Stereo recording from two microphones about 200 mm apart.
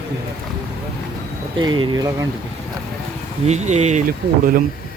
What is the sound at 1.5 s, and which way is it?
Speech, 25° right (ahead or behind).